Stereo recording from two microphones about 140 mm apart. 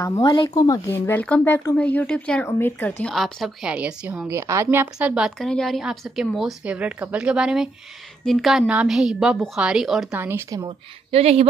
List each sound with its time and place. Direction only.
0.0 s speech: 25° left (ahead or behind)
0.8 s speech: 15° left (ahead or behind)
3.2 s a woman's voice: centre (ahead or behind)
4.3 s a woman's voice: 20° right (ahead or behind); by 10.0 s centre (ahead or behind)
10.1 s a woman's voice: 15° right (ahead or behind)
10.6 s a woman's voice: 45° right (ahead or behind)